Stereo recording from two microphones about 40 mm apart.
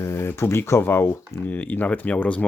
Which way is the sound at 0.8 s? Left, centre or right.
Left.